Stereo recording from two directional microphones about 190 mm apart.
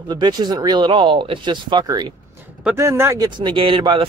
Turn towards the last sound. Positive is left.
turn(degrees=-25)  # may be behind; listen again after turning